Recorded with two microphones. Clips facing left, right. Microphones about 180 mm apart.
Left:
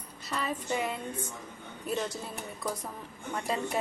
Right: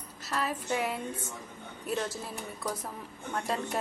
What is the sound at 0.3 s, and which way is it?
A woman's voice, centre (ahead or behind).